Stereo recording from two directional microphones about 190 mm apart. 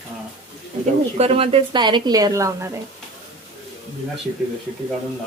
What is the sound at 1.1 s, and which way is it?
Speech, 30° right (ahead or behind).